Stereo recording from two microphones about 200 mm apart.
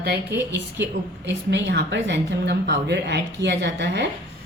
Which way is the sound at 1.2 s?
60° right (ahead or behind).